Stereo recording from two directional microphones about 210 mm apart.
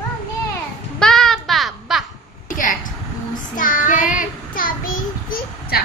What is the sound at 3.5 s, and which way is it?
Child singing, 40° left (ahead or behind).